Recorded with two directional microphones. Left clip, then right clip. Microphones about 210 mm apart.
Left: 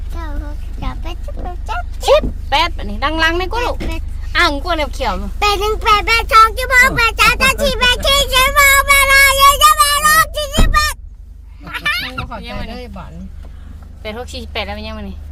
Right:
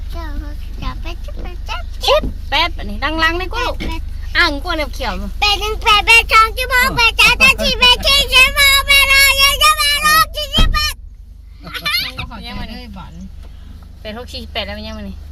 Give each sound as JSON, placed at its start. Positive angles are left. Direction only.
{"t": 1.6, "sound": "a sound", "side_deg": 10}
{"t": 4.3, "sound": "speech", "side_deg": 5}
{"t": 5.4, "sound": "a child's voice", "side_deg": 25}
{"t": 8.8, "sound": "child singing", "side_deg": 20}
{"t": 11.6, "sound": "goat", "side_deg": 45}
{"t": 12.5, "sound": "a sound", "side_deg": 10}
{"t": 14.0, "sound": "speech", "side_deg": 15}